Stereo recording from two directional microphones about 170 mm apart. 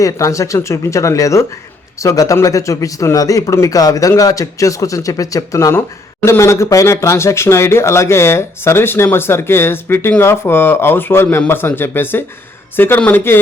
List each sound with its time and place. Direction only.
0.0 s a man's voice: 20° left (ahead or behind)